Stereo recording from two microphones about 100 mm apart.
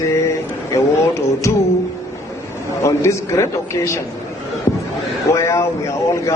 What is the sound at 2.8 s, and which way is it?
A man's voice, 30° left (ahead or behind).